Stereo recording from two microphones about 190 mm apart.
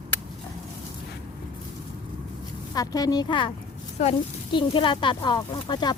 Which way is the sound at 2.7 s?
20° left (ahead or behind).